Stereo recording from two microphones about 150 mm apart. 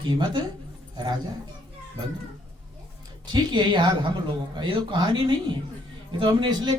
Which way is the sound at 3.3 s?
30° right (ahead or behind).